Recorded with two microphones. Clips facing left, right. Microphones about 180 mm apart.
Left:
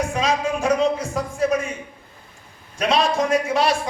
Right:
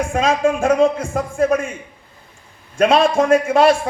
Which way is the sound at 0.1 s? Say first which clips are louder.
Right 5 dB; 50° right (ahead or behind).